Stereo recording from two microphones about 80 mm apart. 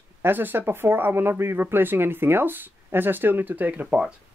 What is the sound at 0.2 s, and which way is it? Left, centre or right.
Speech, right.